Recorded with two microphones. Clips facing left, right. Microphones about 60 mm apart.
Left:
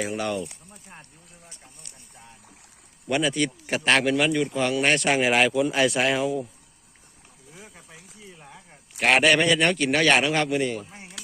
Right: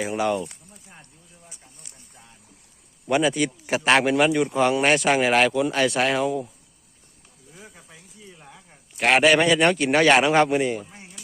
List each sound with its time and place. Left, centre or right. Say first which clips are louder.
0.0 s speech: right 4 dB; centre
3.1 s speech: right 3 dB; centre
7.5 s a sound: right 1 dB; centre
9.0 s speech: right 2 dB; centre